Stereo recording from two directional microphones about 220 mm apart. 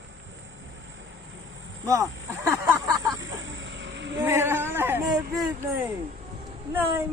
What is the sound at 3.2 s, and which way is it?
Snake, 60° right (ahead or behind).